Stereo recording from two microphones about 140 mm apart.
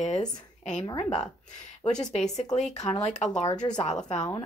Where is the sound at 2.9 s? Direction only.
55° left (ahead or behind).